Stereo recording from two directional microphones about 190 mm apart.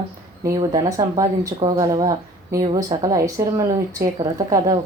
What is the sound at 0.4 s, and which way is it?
Speech, 20° right (ahead or behind).